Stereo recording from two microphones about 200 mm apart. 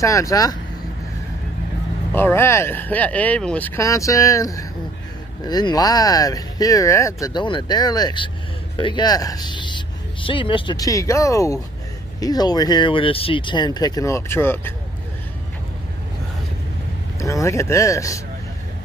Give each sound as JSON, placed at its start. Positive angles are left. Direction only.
{"t": 0.0, "sound": "speech", "side_deg": 15}
{"t": 2.1, "sound": "speech", "side_deg": 10}
{"t": 17.2, "sound": "speech", "side_deg": 15}